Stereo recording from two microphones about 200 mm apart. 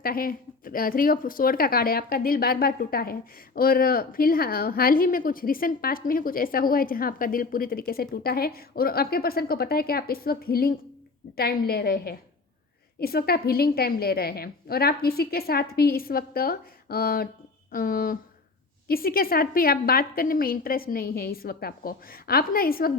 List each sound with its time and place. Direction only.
0.0 s a woman's voice: 45° left (ahead or behind)